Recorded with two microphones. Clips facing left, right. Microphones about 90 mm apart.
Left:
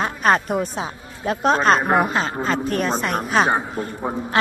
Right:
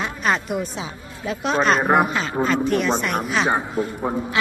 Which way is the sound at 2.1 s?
35° left (ahead or behind).